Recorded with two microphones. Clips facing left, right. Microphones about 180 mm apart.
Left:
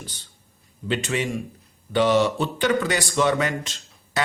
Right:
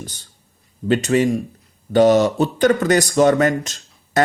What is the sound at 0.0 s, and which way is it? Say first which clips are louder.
A man's voice: right 6 dB; 45° right (ahead or behind).